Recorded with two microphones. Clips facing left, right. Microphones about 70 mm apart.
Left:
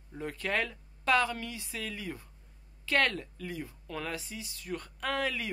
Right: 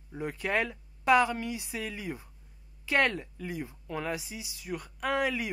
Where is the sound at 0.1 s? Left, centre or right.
Centre.